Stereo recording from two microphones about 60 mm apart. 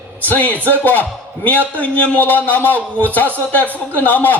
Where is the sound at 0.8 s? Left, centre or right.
Left.